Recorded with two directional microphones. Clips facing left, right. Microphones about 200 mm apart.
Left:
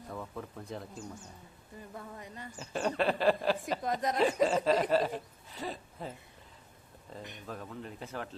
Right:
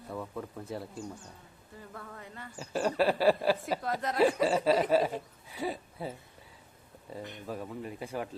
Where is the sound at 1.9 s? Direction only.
20° left (ahead or behind).